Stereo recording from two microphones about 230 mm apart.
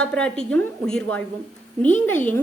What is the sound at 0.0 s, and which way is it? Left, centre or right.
A woman's voice, centre.